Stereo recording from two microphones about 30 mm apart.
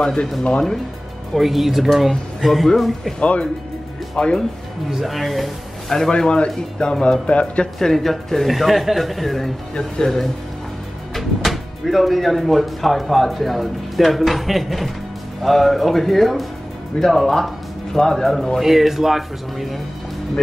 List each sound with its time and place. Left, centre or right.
0.0 s speech: left
1.3 s speech: centre
3.2 s speech: left
5.0 s speech: centre
6.1 s speech: left
7.2 s speech: left
7.8 s speech: centre
9.8 s speech: left
11.1 s speech: centre
18.6 s speech: centre